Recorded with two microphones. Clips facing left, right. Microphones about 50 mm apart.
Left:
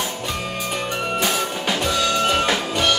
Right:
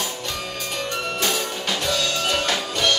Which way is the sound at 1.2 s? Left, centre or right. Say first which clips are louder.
Left 3 dB; centre.